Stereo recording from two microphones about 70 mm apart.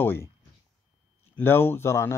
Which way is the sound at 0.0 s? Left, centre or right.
Left.